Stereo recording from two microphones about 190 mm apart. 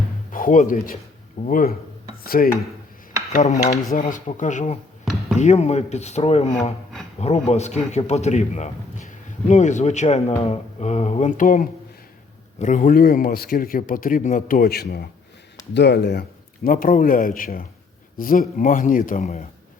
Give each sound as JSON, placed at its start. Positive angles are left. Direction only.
{"t": 0.3, "sound": "speech", "side_deg": 45}
{"t": 3.3, "sound": "speech", "side_deg": 40}
{"t": 16.6, "sound": "speech", "side_deg": 45}